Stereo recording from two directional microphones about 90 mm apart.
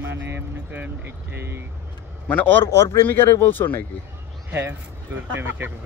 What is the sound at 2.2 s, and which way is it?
Speech, 20° left (ahead or behind).